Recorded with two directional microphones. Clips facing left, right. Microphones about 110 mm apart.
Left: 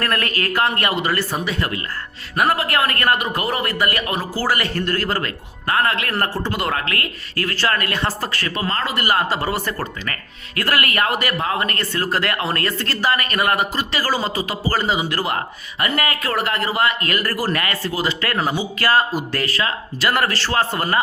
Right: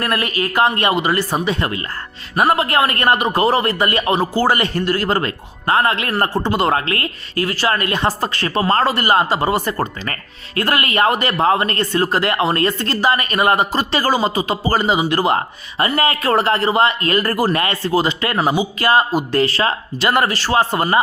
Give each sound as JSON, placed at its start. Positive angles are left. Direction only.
{"t": 0.0, "sound": "speech", "side_deg": -15}
{"t": 7.4, "sound": "speech", "side_deg": -15}